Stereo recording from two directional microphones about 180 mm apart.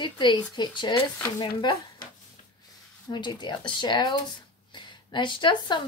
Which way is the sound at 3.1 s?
25° left (ahead or behind).